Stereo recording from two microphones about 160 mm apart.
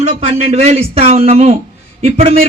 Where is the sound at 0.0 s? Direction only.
40° right (ahead or behind).